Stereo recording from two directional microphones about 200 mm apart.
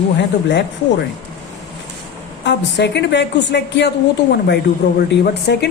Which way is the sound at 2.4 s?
60° left (ahead or behind).